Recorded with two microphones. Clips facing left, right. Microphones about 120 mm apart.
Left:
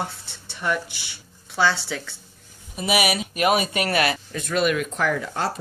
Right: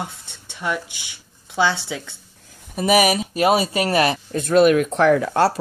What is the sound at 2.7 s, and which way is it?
Speech, 45° right (ahead or behind).